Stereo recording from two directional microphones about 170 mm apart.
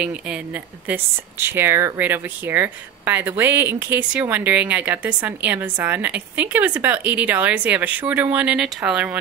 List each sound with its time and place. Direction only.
0.8 s speech: 10° right (ahead or behind)